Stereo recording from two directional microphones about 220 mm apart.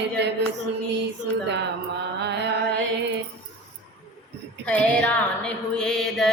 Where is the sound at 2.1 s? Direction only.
50° right (ahead or behind).